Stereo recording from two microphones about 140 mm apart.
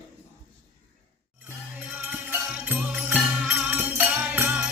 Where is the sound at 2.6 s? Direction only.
10° right (ahead or behind).